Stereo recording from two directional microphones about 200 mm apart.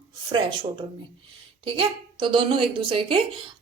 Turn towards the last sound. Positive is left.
turn(degrees=-25)  # may be behind; listen again after turning